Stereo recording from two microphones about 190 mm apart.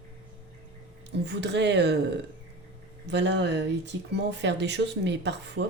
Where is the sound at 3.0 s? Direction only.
65° right (ahead or behind).